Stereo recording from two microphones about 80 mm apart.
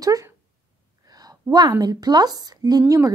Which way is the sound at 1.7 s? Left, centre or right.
Right.